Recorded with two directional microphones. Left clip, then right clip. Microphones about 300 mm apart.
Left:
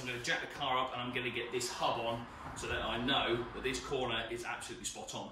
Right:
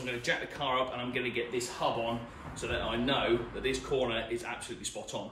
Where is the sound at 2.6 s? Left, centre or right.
Centre.